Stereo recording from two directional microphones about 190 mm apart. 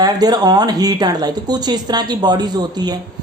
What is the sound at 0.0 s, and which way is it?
Speech, 20° right (ahead or behind).